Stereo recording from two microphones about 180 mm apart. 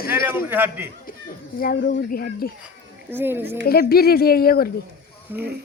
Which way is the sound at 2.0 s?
55° left (ahead or behind).